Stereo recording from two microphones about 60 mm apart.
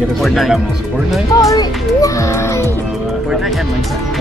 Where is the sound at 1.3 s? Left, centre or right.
Left.